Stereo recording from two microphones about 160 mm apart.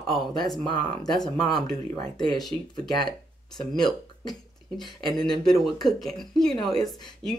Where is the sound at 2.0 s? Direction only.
25° left (ahead or behind).